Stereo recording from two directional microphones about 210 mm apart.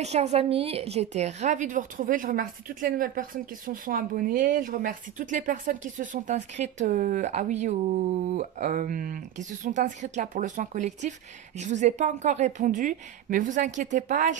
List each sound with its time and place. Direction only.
0.0 s a woman's voice: 30° right (ahead or behind)